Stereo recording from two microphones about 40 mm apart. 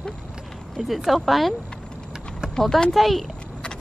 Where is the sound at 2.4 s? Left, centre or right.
Centre.